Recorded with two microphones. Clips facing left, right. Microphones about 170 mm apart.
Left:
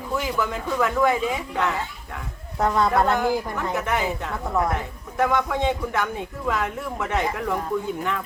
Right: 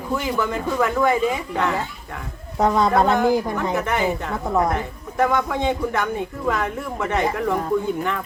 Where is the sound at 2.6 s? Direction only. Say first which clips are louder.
Right 3 dB; 15° right (ahead or behind).